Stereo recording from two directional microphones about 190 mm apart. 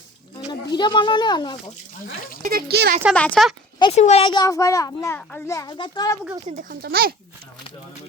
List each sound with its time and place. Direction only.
0.4 s speech: 25° left (ahead or behind)
2.4 s speech: 50° right (ahead or behind)
3.2 s speech: 5° left (ahead or behind)
3.8 s a child's voice: 25° left (ahead or behind)
6.5 s speech: 50° right (ahead or behind)